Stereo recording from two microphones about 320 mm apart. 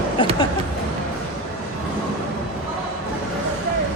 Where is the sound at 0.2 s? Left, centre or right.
Centre.